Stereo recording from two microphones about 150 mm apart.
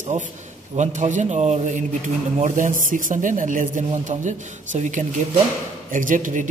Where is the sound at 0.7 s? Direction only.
55° right (ahead or behind).